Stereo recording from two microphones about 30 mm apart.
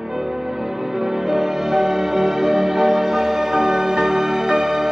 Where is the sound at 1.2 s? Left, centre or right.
Centre.